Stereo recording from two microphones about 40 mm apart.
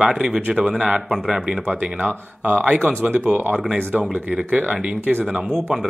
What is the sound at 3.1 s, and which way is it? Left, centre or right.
Speech, right.